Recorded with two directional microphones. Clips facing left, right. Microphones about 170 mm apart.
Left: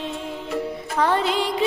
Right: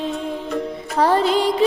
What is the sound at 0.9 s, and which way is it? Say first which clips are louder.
Music: right 4 dB; 35° right (ahead or behind).